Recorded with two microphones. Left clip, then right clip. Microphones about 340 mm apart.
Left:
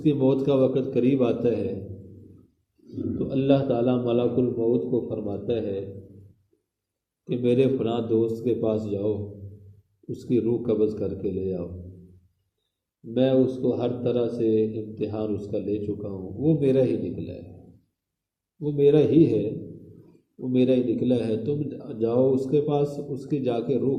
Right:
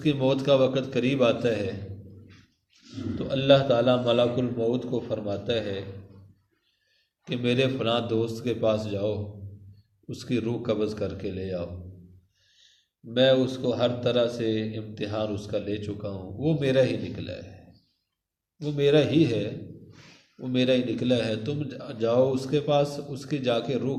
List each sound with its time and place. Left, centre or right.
0.0 s a man's voice: right
3.2 s a man's voice: right
7.3 s a man's voice: right
13.1 s a man's voice: right
18.6 s a man's voice: right
20.5 s a man's voice: right